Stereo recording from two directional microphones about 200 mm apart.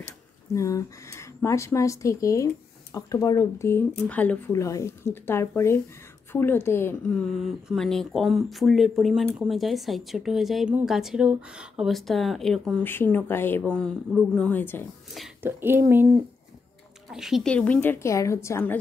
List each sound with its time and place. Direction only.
0.6 s a woman's voice: 15° left (ahead or behind)
15.1 s speech: 5° right (ahead or behind)
17.1 s speech: centre (ahead or behind)